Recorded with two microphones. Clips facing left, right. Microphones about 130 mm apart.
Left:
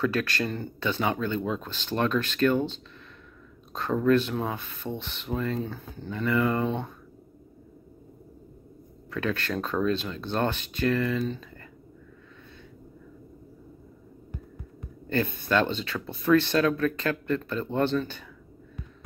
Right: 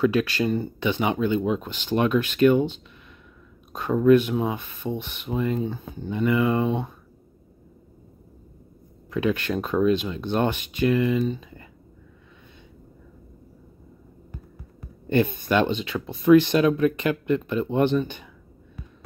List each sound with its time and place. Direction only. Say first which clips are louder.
0.0 s speech: right 5 dB; 15° right (ahead or behind)
9.1 s speech: right 5 dB; 15° right (ahead or behind)
15.0 s speech: right 5 dB; 15° right (ahead or behind)